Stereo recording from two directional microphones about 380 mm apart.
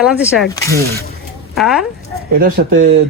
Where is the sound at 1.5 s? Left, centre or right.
Centre.